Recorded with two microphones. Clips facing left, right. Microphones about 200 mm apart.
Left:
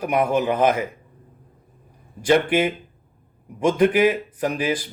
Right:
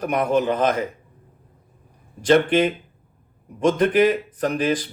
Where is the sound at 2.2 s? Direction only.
10° left (ahead or behind).